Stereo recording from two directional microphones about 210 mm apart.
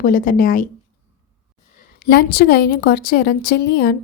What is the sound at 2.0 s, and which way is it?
A woman's voice, 45° left (ahead or behind).